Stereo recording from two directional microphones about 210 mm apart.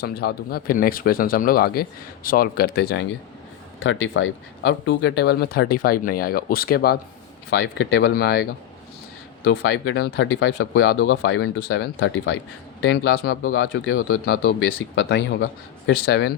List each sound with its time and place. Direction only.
0.0 s speech: 50° left (ahead or behind)
3.8 s speech: 65° left (ahead or behind); by 8.4 s 50° left (ahead or behind)
9.6 s speech: 60° left (ahead or behind)
13.4 s speech: 70° left (ahead or behind)
14.1 s speech: 45° left (ahead or behind)
14.6 s speech: 65° left (ahead or behind)
16.0 s speech: 50° left (ahead or behind)